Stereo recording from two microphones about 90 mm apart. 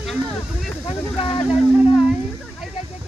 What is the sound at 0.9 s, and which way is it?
Speech, 90° left.